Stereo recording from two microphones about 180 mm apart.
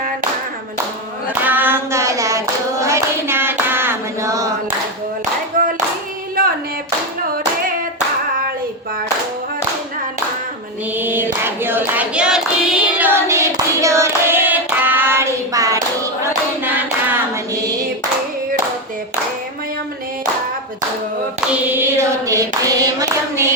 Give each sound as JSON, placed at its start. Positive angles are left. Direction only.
{"t": 1.4, "sound": "hands", "side_deg": -10}
{"t": 5.5, "sound": "clapping", "side_deg": -50}
{"t": 6.4, "sound": "a sound", "side_deg": -50}
{"t": 10.9, "sound": "a sound", "side_deg": -10}
{"t": 11.4, "sound": "singing", "side_deg": -10}
{"t": 16.6, "sound": "hands", "side_deg": -10}
{"t": 21.5, "sound": "singing", "side_deg": -10}